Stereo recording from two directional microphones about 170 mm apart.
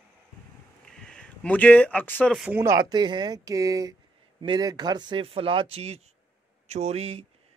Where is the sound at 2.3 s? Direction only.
Centre (ahead or behind).